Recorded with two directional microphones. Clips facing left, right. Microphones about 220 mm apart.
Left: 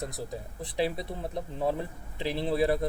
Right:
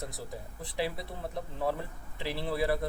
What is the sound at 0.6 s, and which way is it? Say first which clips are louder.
Speech: left 4 dB; 20° left (ahead or behind).